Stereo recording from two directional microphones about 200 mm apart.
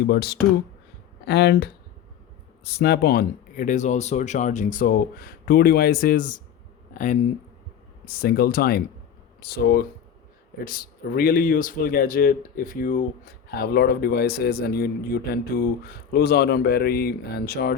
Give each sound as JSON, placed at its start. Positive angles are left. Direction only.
{"t": 0.0, "sound": "speech", "side_deg": 55}